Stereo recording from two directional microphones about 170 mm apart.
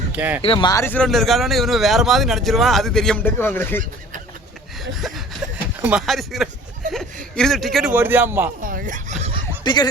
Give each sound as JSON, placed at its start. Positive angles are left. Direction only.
{"t": 0.1, "sound": "speech", "side_deg": -10}
{"t": 0.4, "sound": "speech", "side_deg": 30}
{"t": 4.8, "sound": "a sound", "side_deg": 0}
{"t": 5.8, "sound": "speech", "side_deg": -5}
{"t": 7.9, "sound": "speech", "side_deg": -10}
{"t": 8.6, "sound": "speech", "side_deg": -50}
{"t": 9.6, "sound": "speech", "side_deg": 25}